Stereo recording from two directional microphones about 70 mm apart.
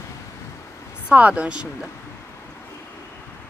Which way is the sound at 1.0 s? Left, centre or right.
Centre.